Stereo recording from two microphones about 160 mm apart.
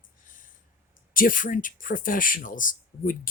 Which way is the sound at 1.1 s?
60° left (ahead or behind).